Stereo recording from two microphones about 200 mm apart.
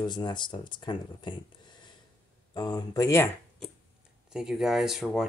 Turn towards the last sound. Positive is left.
turn(degrees=0)  # may be behind; listen again after turning